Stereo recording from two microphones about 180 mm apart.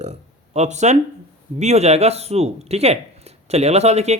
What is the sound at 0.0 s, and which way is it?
Speech, 40° right (ahead or behind).